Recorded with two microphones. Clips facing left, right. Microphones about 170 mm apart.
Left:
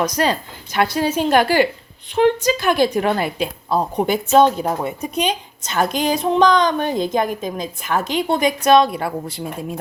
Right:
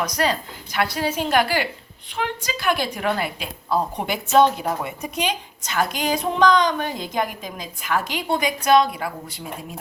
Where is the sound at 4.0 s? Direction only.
40° left (ahead or behind).